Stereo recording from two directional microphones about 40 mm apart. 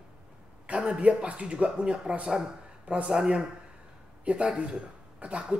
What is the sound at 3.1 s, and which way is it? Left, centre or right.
Speech, centre.